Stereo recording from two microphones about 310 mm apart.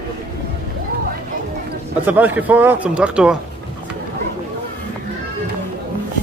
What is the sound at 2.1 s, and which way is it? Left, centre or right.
Speech, centre.